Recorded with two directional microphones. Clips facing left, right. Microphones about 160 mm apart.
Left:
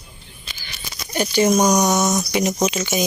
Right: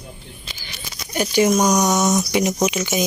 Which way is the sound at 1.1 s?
10° right (ahead or behind).